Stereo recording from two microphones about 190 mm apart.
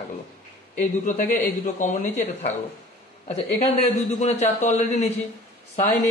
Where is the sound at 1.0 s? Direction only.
45° left (ahead or behind).